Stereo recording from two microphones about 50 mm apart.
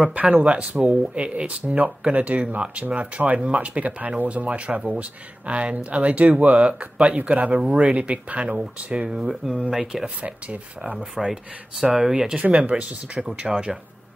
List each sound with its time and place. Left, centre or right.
0.0 s speech: right
9.1 s speech: centre
10.0 s speech: right
11.2 s speech: centre
12.4 s speech: right